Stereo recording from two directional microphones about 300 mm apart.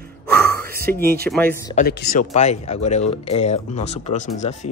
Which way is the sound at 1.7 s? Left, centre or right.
Left.